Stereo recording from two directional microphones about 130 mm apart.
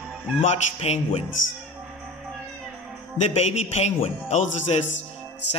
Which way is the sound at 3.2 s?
55° left (ahead or behind).